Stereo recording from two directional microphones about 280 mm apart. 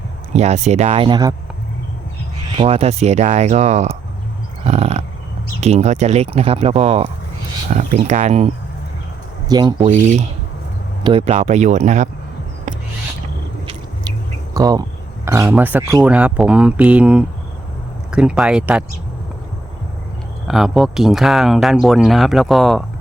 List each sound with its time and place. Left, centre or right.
0.3 s speech: right
2.6 s speech: right
9.5 s speech: centre
14.5 s speech: centre
20.5 s speech: centre